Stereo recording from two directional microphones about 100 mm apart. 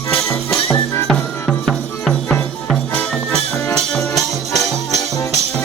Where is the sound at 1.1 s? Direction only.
5° left (ahead or behind).